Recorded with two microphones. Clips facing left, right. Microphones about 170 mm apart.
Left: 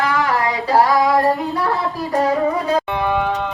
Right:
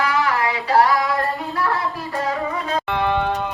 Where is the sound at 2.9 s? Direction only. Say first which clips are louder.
Left 1 dB; 10° left (ahead or behind).